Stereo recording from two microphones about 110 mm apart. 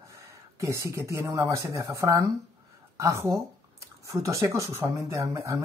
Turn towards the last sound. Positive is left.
turn(degrees=-30)  # may be behind; listen again after turning